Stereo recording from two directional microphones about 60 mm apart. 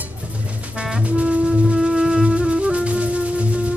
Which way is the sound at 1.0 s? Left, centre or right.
Centre.